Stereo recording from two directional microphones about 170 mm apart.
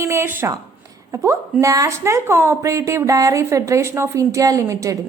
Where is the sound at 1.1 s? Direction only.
15° right (ahead or behind).